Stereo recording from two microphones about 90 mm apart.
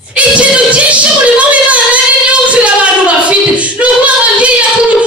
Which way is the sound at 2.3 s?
15° right (ahead or behind).